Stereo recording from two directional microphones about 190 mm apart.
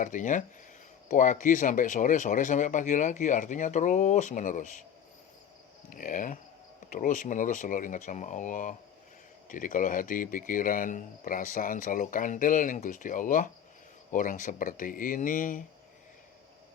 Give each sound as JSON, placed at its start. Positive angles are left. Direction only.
{"t": 0.0, "sound": "speech", "side_deg": 40}
{"t": 5.9, "sound": "speech", "side_deg": 45}